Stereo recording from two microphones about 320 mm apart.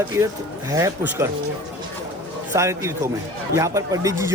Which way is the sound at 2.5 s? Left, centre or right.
Centre.